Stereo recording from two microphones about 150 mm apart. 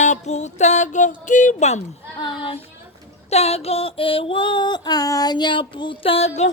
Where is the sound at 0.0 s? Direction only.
50° left (ahead or behind).